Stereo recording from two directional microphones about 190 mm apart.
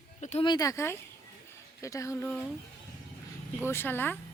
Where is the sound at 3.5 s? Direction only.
10° left (ahead or behind).